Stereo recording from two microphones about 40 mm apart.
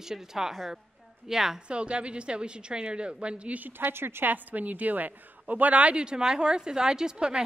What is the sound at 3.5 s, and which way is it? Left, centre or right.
Speech, right.